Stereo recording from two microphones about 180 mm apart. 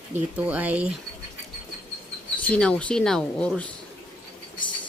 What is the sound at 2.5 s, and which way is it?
Speech, 5° left (ahead or behind).